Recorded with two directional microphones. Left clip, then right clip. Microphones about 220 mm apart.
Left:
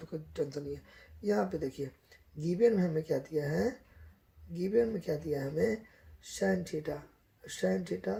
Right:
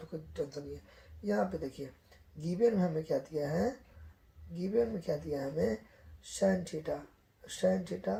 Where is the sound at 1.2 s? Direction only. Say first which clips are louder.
Left 2 dB; 50° left (ahead or behind).